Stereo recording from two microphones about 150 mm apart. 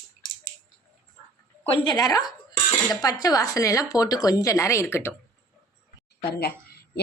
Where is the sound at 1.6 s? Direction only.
35° left (ahead or behind); by 5.1 s 15° left (ahead or behind).